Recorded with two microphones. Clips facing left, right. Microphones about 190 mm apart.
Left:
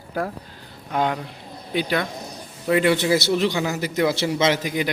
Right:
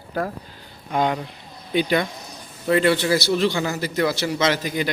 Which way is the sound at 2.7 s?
15° left (ahead or behind).